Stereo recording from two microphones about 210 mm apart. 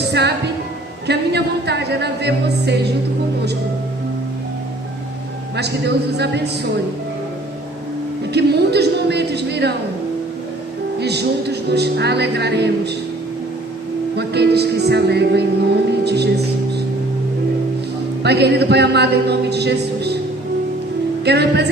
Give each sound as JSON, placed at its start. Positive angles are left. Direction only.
{"t": 0.1, "sound": "music", "side_deg": -50}
{"t": 1.0, "sound": "a man's voice", "side_deg": -50}
{"t": 5.5, "sound": "a man's voice", "side_deg": -50}
{"t": 8.3, "sound": "speech", "side_deg": -50}
{"t": 11.0, "sound": "a man's voice", "side_deg": -50}
{"t": 14.2, "sound": "a man's voice", "side_deg": -50}
{"t": 18.2, "sound": "a man's voice", "side_deg": -50}
{"t": 21.2, "sound": "a man's voice", "side_deg": -50}